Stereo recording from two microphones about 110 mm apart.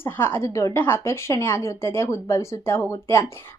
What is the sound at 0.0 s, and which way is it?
A woman's voice, 20° left (ahead or behind).